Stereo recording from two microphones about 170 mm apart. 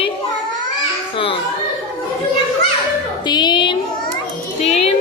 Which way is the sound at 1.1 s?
30° left (ahead or behind).